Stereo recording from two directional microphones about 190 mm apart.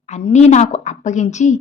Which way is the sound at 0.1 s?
35° left (ahead or behind).